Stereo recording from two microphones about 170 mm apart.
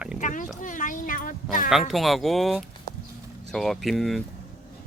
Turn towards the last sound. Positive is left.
turn(degrees=0)  # may be behind; listen again after turning